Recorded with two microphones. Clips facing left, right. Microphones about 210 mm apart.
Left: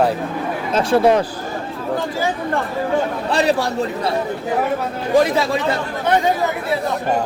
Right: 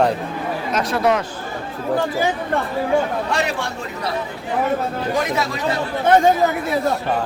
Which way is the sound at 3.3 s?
35° left (ahead or behind).